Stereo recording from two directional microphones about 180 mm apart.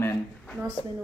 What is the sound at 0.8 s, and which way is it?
Speech, 30° left (ahead or behind).